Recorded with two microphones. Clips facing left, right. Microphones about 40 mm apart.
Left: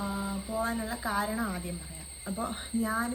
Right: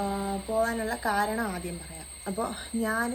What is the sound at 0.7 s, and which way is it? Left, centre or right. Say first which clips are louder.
Speech: right 4 dB; right.